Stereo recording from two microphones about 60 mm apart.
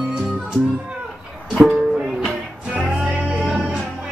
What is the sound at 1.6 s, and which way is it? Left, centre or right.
Music, centre.